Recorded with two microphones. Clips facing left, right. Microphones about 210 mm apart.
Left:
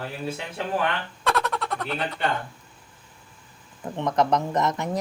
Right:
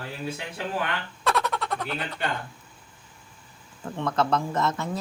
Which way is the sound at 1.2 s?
Centre (ahead or behind).